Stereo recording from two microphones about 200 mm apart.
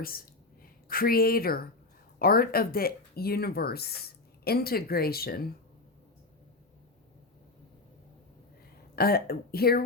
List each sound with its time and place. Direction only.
0.0 s speech: 45° left (ahead or behind)
9.0 s speech: 50° left (ahead or behind)